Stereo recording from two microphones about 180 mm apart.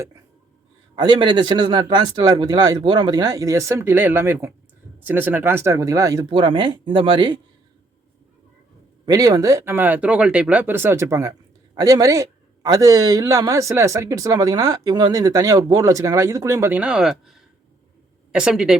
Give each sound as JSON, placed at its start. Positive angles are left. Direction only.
{"t": 0.9, "sound": "a man's voice", "side_deg": -25}
{"t": 9.0, "sound": "a man's voice", "side_deg": -20}